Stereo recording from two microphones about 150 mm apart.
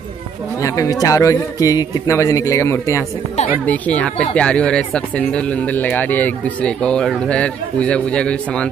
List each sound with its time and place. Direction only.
0.6 s a man's voice: 20° left (ahead or behind)